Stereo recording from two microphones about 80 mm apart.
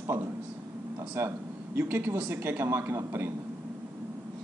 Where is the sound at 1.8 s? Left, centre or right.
Right.